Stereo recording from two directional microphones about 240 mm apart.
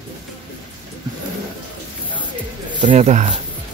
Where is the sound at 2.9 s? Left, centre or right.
Right.